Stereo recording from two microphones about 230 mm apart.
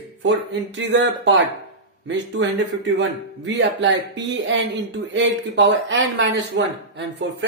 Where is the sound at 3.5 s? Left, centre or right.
Right.